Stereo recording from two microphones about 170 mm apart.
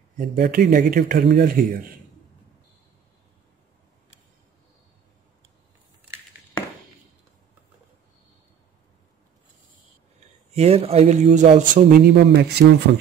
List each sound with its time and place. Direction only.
0.2 s speech: 60° right (ahead or behind)
10.5 s speech: 40° right (ahead or behind); by 13.0 s 75° right (ahead or behind)